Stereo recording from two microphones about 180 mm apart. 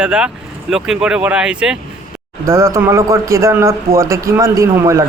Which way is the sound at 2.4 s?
15° right (ahead or behind).